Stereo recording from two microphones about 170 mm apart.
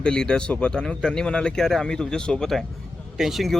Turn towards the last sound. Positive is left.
turn(degrees=0)  # may be behind; listen again after turning